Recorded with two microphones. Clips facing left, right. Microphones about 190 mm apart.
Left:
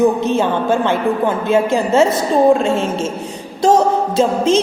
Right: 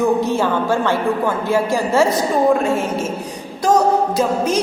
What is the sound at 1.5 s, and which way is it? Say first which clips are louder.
Speech: left 3 dB; 20° left (ahead or behind).